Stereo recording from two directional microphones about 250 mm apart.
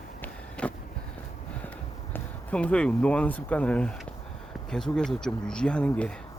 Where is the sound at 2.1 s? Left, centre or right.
Centre.